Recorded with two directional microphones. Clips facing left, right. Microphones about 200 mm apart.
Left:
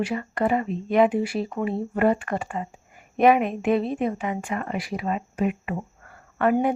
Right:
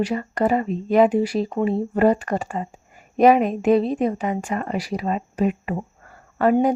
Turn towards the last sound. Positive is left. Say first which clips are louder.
# right 4 dB
turn(degrees=-30)  # may be behind; listen again after turning